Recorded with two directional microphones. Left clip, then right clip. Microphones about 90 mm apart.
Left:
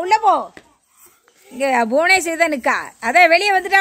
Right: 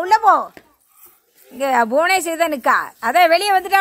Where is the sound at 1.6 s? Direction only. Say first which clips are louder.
Even; 5° left (ahead or behind).